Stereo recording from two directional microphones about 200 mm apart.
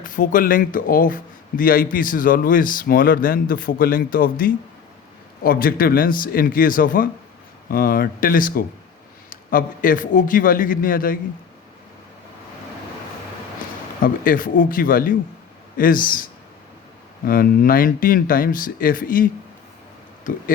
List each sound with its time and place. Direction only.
0.0 s speech: 40° left (ahead or behind)
14.0 s speech: 45° left (ahead or behind)
17.2 s speech: 45° left (ahead or behind)